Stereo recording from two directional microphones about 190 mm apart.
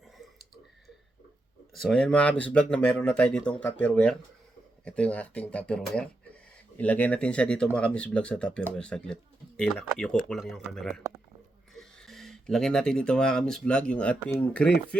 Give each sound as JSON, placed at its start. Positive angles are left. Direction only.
{"t": 1.8, "sound": "speech", "side_deg": 5}